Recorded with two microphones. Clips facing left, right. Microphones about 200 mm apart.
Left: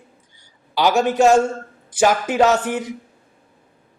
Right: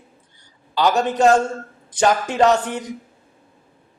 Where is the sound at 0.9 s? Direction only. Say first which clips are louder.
Left 1 dB; 10° left (ahead or behind).